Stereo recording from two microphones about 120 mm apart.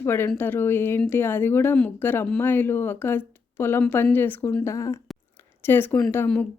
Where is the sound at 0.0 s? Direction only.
20° left (ahead or behind).